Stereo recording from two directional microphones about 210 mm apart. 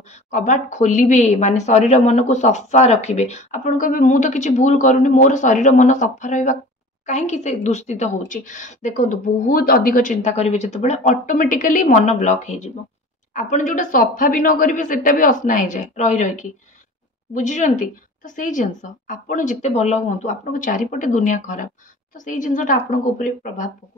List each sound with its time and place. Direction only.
0.1 s a woman's voice: 35° left (ahead or behind)